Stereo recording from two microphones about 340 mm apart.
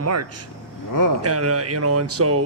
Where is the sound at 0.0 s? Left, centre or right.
Right.